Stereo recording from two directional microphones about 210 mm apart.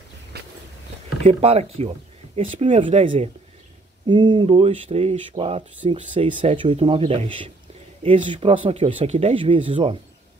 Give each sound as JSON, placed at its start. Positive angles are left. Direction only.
{"t": 1.2, "sound": "speech", "side_deg": -30}